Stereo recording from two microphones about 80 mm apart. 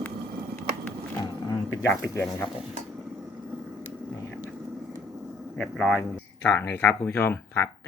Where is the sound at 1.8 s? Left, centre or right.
Left.